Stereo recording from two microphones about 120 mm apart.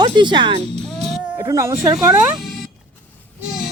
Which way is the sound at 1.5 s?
25° right (ahead or behind).